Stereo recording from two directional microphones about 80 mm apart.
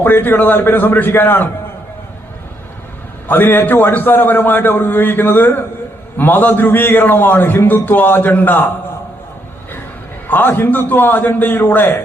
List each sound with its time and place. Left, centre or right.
0.0 s a man's voice: left
3.2 s a man's voice: left
10.2 s a man's voice: left